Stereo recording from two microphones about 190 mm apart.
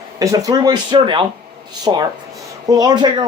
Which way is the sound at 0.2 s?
20° right (ahead or behind).